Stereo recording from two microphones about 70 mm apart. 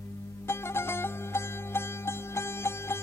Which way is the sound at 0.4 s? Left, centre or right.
Left.